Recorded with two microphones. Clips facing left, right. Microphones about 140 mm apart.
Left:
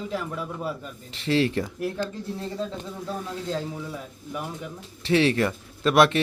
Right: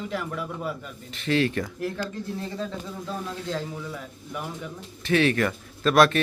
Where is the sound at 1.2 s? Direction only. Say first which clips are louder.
Left 1 dB; 25° left (ahead or behind).